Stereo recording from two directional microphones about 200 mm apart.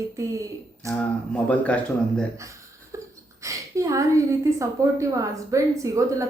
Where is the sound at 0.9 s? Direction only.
5° left (ahead or behind).